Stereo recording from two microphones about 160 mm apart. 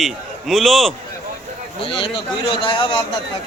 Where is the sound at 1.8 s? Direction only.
35° left (ahead or behind).